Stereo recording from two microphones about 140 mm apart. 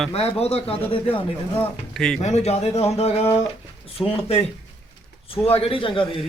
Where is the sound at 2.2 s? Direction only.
50° left (ahead or behind).